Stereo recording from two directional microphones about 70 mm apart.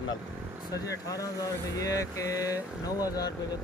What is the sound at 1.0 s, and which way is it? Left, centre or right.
Speech, left.